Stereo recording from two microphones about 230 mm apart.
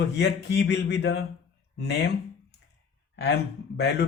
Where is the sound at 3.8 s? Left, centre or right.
Left.